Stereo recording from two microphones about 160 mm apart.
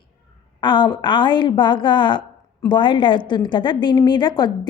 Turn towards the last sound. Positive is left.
turn(degrees=25)  # may be behind; listen again after turning